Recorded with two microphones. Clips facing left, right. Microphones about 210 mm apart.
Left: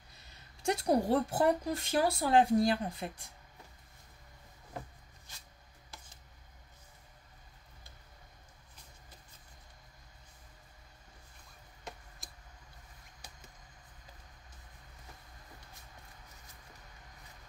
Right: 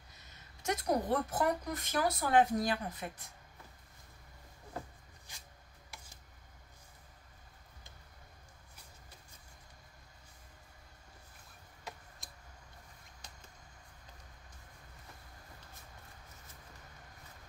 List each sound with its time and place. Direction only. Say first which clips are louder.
0.6 s speech: left 4 dB; 30° left (ahead or behind)
12.2 s tick: left 2 dB; centre (ahead or behind)
13.2 s a sound: left 1 dB; 5° left (ahead or behind)